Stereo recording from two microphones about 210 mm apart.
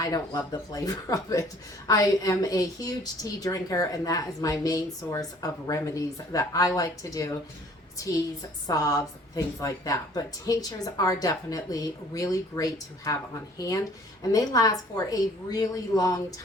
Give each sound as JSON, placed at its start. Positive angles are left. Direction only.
{"t": 0.0, "sound": "a woman's voice", "side_deg": 15}
{"t": 8.6, "sound": "a woman's voice", "side_deg": 15}